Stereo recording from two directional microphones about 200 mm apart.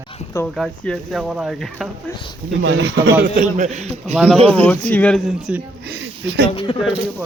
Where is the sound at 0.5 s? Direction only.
5° left (ahead or behind).